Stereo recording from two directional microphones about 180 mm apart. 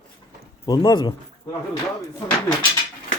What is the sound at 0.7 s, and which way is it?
Speech, 20° left (ahead or behind).